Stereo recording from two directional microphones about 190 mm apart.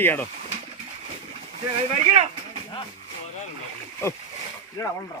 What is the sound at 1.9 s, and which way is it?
Speech, 30° right (ahead or behind).